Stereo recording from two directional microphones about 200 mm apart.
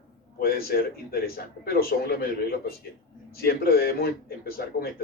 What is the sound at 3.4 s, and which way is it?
A man's voice, 50° left (ahead or behind).